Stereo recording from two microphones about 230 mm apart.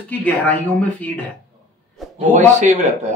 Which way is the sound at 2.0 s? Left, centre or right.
Centre.